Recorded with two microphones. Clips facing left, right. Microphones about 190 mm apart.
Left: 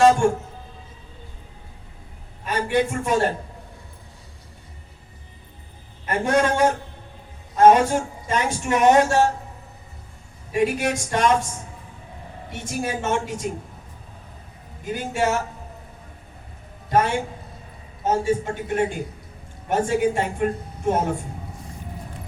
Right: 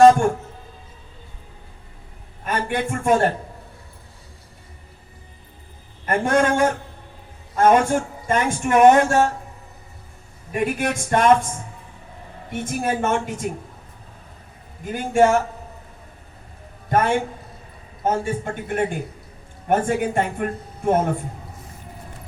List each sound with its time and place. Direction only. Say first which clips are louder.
2.4 s a man's voice: left 2 dB; 50° right (ahead or behind)
6.1 s a man's voice: right 2 dB; 50° right (ahead or behind)
10.5 s speech: left 1 dB; 55° right (ahead or behind)
12.5 s a man's voice: right 4 dB; 55° right (ahead or behind)
14.8 s a man's voice: right 6 dB; 50° right (ahead or behind)
16.9 s a man's voice: right 1 dB; 55° right (ahead or behind)